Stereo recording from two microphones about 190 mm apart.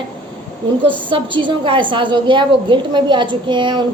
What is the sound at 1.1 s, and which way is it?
A woman's voice, 25° right (ahead or behind).